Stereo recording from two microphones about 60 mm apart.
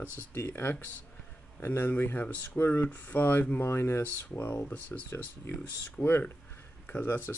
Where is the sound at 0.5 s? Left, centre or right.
Left.